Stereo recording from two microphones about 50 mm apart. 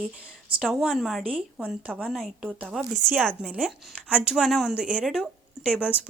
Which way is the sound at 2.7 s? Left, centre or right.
Centre.